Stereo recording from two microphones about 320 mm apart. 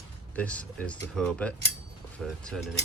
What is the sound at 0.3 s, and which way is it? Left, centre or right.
Speech, centre.